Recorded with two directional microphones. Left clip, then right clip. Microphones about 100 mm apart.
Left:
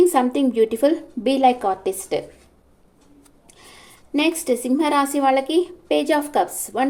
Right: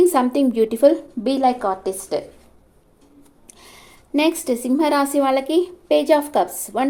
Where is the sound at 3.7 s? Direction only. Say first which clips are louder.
Right 2 dB; 25° right (ahead or behind).